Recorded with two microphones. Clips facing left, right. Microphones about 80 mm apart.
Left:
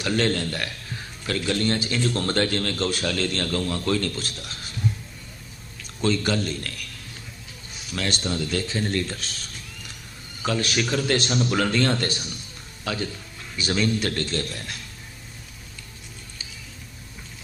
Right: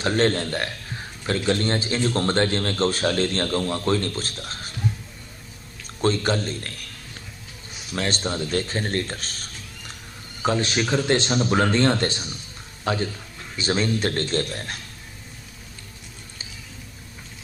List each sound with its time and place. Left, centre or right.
0.0 s a man's voice: right
6.0 s a man's voice: right
7.9 s a man's voice: right
10.4 s a man's voice: right